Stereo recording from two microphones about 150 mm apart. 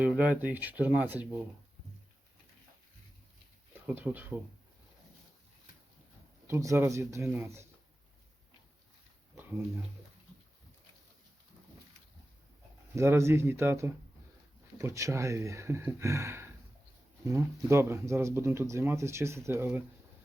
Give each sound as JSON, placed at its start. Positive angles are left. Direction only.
{"t": 0.0, "sound": "speech", "side_deg": -10}
{"t": 3.8, "sound": "speech", "side_deg": -10}
{"t": 6.5, "sound": "speech", "side_deg": -20}
{"t": 9.3, "sound": "a sound", "side_deg": -15}
{"t": 13.0, "sound": "speech", "side_deg": -20}